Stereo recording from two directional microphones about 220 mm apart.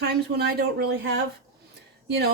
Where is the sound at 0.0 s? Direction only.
45° right (ahead or behind).